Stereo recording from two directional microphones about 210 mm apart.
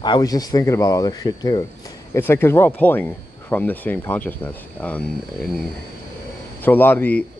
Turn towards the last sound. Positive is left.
turn(degrees=10)  # may be behind; listen again after turning